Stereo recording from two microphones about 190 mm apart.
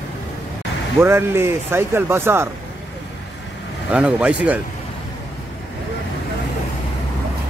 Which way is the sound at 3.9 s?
5° right (ahead or behind).